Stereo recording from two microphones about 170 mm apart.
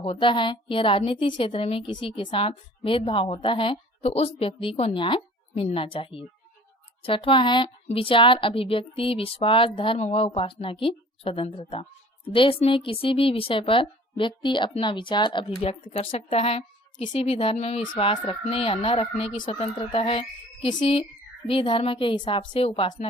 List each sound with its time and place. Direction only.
0.0 s a woman's voice: 30° left (ahead or behind)